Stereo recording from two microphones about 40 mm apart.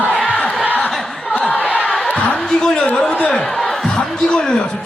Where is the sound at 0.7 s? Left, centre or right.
Left.